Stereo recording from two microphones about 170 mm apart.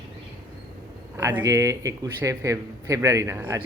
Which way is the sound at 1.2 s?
15° right (ahead or behind).